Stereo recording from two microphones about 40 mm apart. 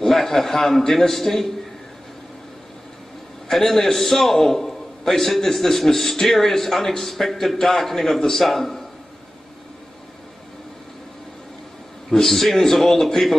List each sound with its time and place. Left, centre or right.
0.1 s a man's voice: centre
3.4 s a man's voice: centre
12.1 s a man's voice: centre